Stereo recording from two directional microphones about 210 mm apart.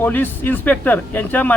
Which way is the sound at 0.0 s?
10° left (ahead or behind).